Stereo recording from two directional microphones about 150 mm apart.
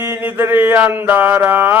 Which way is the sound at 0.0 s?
15° right (ahead or behind).